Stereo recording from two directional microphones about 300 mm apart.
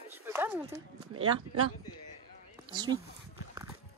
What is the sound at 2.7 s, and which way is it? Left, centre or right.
Speech, centre.